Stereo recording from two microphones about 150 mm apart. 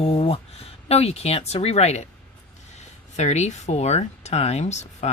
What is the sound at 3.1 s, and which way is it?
Speech, 50° left (ahead or behind).